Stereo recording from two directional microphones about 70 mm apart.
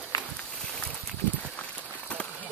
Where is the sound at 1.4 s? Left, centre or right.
Left.